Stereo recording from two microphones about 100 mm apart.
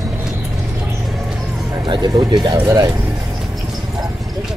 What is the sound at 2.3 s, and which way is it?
Speech, 45° right (ahead or behind).